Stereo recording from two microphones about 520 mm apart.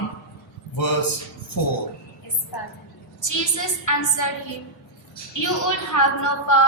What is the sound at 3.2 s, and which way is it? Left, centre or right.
A woman's voice, left.